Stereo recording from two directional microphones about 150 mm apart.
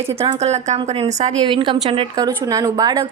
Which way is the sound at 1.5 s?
35° right (ahead or behind).